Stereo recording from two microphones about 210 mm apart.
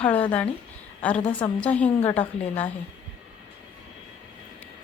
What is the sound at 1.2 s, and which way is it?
Speech, 25° left (ahead or behind).